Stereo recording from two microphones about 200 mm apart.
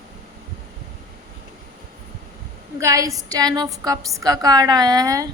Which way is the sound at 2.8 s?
15° right (ahead or behind).